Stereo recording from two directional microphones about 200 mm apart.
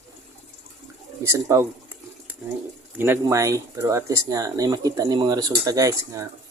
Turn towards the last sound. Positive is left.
turn(degrees=-15)  # may be behind; listen again after turning